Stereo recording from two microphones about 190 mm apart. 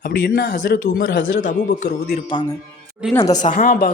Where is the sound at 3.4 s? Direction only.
45° left (ahead or behind).